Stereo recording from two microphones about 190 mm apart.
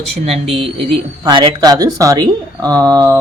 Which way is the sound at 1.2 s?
20° right (ahead or behind).